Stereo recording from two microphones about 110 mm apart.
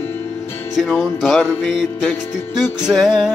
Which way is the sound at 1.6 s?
5° right (ahead or behind).